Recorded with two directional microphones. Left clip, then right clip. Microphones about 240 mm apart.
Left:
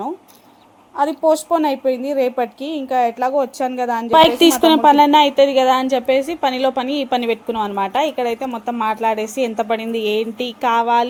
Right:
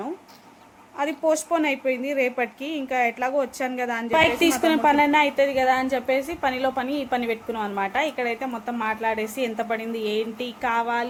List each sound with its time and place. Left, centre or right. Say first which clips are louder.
1.2 s speech: left 6 dB; centre
4.1 s speech: left 8 dB; left